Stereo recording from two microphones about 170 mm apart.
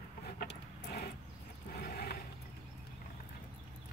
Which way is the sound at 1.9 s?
65° left (ahead or behind).